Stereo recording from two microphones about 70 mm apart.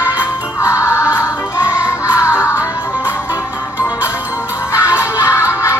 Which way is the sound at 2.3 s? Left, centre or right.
Left.